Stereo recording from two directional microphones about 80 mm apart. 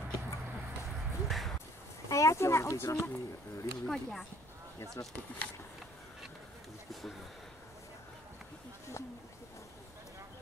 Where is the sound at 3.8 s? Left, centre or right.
Centre.